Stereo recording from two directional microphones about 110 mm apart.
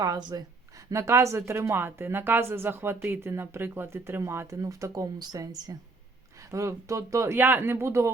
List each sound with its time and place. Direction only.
0.0 s speech: 35° right (ahead or behind)
0.9 s speech: 25° right (ahead or behind)